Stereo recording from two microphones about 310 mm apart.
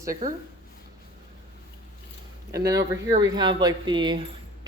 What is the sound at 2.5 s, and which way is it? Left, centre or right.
Speech, centre.